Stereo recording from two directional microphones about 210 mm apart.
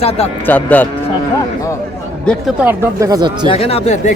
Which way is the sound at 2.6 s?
15° right (ahead or behind).